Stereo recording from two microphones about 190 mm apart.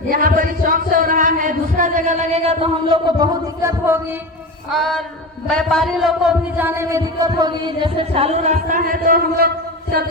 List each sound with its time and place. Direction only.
0.1 s speech: 50° right (ahead or behind); by 4.0 s 15° right (ahead or behind)
4.7 s a sound: centre (ahead or behind)
5.5 s a man's voice: 5° left (ahead or behind); by 9.5 s 50° right (ahead or behind)